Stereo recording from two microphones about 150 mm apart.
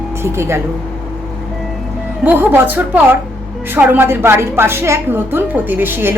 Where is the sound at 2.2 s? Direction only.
10° right (ahead or behind).